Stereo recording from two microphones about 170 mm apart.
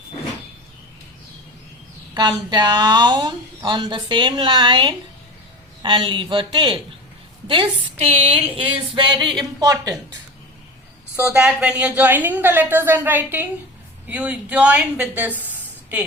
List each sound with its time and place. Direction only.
2.5 s speech: 25° right (ahead or behind)
7.4 s a sound: 30° right (ahead or behind)
9.4 s speech: 20° right (ahead or behind)
11.4 s a woman's voice: 5° right (ahead or behind)